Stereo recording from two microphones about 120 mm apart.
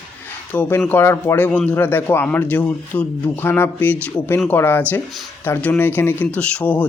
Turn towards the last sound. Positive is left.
turn(degrees=10)  # may be behind; listen again after turning